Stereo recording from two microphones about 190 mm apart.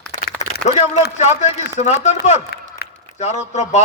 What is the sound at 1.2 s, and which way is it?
Speech, 35° left (ahead or behind).